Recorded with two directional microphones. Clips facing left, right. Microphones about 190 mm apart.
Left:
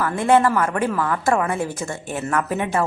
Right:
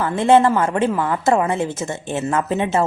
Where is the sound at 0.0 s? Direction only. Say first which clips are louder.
Right 3 dB; 25° right (ahead or behind).